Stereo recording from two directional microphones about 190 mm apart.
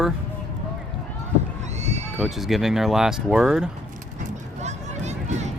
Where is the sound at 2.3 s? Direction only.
Centre (ahead or behind).